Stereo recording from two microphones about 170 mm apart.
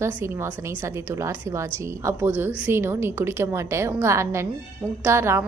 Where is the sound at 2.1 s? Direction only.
15° right (ahead or behind).